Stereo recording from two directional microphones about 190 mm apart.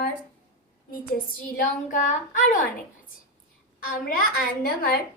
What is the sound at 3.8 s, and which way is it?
A woman's voice, 50° left (ahead or behind).